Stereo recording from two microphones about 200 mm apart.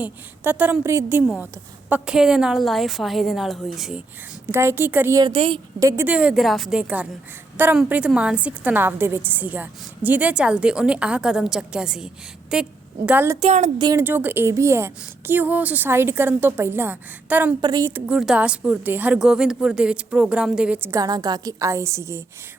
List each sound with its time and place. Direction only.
0.0 s a woman's voice: 10° right (ahead or behind); by 5.9 s 25° right (ahead or behind)
6.0 s a woman's voice: 5° right (ahead or behind)
13.4 s speech: 35° right (ahead or behind)
13.7 s speech: 20° right (ahead or behind)
14.0 s a woman's voice: 10° right (ahead or behind)
17.6 s a woman's voice: 20° right (ahead or behind)